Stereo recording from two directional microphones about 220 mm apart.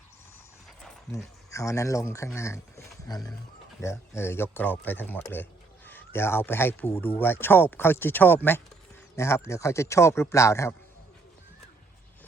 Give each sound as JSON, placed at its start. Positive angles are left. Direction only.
{"t": 1.1, "sound": "speech", "side_deg": 15}